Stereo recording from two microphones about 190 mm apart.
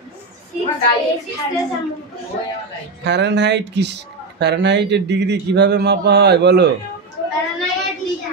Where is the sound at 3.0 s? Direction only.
65° right (ahead or behind).